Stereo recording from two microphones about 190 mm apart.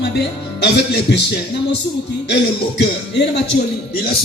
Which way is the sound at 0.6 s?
65° left (ahead or behind).